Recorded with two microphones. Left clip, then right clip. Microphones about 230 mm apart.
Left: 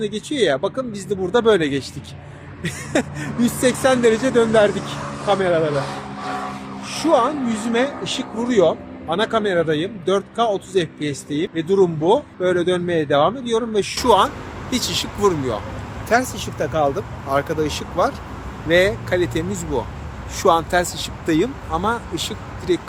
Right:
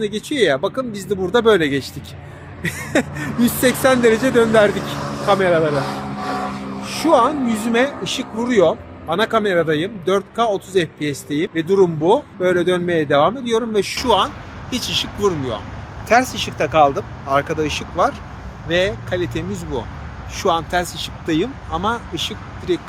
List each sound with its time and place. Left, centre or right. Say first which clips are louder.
0.0 s speech: right 2 dB; centre
5.0 s vehicle: right 3 dB; right
5.3 s speech: right 3 dB; centre
5.7 s a sound: right 2 dB; right
6.8 s a sound: right 2 dB; centre
7.3 s speech: right 3 dB; centre
14.0 s speech: left 3 dB; centre
16.0 s speech: right 4 dB; centre